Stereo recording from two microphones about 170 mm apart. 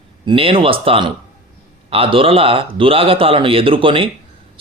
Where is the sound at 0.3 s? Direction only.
30° right (ahead or behind).